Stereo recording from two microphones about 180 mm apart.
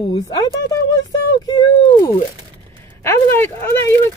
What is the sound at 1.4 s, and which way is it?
Speech, 20° left (ahead or behind).